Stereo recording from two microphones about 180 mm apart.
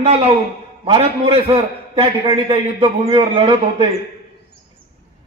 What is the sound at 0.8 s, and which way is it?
A man's voice, 30° right (ahead or behind).